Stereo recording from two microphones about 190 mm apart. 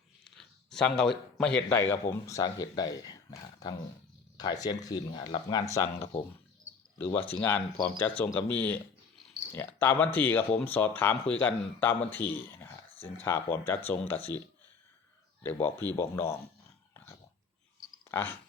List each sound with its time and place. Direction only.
0.3 s a man's voice: centre (ahead or behind); by 5.9 s 20° left (ahead or behind)
7.0 s speech: 10° left (ahead or behind)
15.4 s speech: 10° left (ahead or behind)
18.1 s speech: 10° left (ahead or behind)